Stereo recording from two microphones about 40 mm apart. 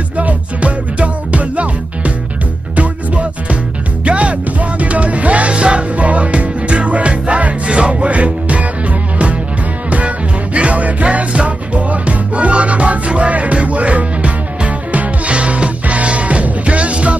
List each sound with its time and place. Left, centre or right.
0.2 s music: right
9.8 s music: right